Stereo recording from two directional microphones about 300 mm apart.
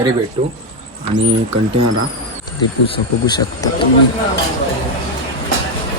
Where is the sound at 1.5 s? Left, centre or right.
Right.